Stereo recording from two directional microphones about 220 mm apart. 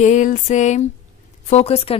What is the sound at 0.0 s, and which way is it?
A woman's voice, 35° left (ahead or behind).